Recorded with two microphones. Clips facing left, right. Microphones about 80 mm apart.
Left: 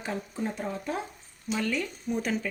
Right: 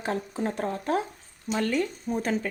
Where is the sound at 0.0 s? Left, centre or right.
Right.